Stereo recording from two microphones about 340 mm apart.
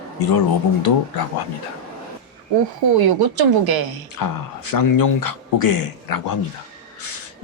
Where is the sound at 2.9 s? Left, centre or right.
Right.